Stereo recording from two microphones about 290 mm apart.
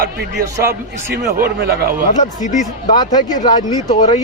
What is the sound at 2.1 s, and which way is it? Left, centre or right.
Speech, left.